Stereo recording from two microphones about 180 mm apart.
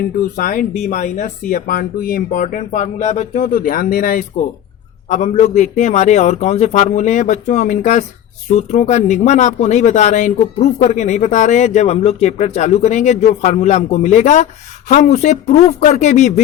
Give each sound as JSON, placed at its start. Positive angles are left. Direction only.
{"t": 0.3, "sound": "speech", "side_deg": 50}